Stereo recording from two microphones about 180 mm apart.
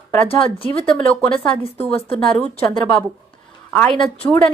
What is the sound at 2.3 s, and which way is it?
Speech, 5° left (ahead or behind).